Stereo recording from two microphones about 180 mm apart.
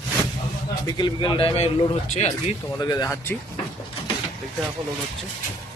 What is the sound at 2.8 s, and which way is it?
Speech, 20° left (ahead or behind).